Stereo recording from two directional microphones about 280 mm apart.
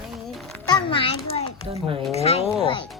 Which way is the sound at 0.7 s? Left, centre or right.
Centre.